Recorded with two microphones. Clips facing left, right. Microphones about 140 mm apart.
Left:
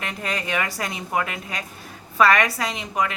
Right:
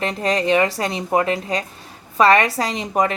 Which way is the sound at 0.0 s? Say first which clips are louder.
Right 9 dB; 35° right (ahead or behind).